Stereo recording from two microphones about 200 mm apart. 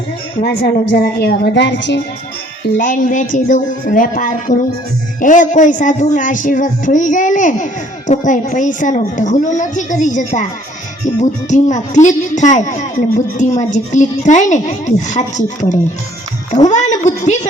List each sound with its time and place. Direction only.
0.4 s a woman's voice: 50° left (ahead or behind)
2.7 s speech: 40° left (ahead or behind)